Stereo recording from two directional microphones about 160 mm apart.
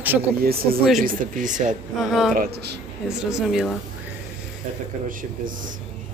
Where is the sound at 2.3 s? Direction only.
70° right (ahead or behind).